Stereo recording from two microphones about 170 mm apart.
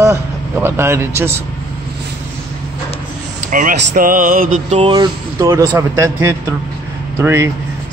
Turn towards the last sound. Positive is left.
turn(degrees=-15)  # may be behind; listen again after turning